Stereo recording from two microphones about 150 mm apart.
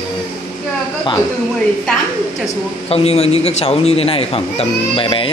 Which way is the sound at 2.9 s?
40° left (ahead or behind).